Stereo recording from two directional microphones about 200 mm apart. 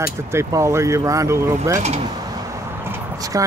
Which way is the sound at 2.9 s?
15° right (ahead or behind).